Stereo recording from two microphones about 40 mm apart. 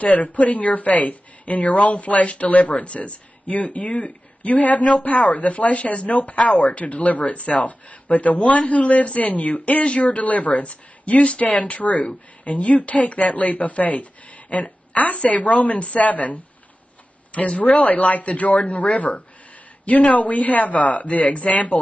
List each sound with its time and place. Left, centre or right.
0.0 s a woman's voice: left
17.6 s a woman's voice: left